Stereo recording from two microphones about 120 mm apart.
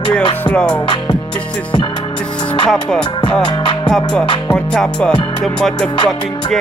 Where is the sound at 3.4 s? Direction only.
40° left (ahead or behind).